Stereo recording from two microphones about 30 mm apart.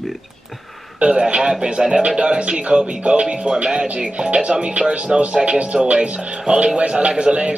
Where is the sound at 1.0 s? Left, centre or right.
Right.